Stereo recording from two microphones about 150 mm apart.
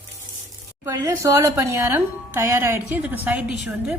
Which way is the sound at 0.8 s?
20° right (ahead or behind).